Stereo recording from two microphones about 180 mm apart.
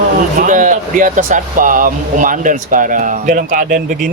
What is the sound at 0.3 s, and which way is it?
Speech, 45° right (ahead or behind).